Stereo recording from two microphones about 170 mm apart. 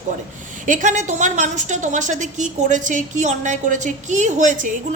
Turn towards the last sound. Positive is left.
turn(degrees=-50)  # may be behind; listen again after turning